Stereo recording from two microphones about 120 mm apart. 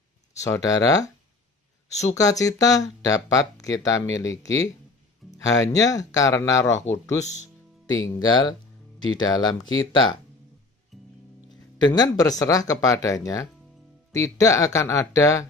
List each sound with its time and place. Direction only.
0.4 s speech: 30° left (ahead or behind)
2.1 s speech: 30° left (ahead or behind)
8.0 s speech: 35° left (ahead or behind)
10.9 s music: centre (ahead or behind)
11.8 s speech: 35° left (ahead or behind)